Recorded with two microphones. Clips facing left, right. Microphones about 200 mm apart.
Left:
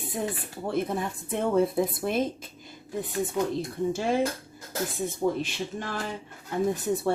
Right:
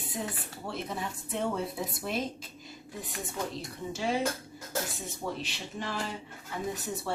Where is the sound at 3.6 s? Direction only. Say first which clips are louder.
Left 8 dB; 50° left (ahead or behind).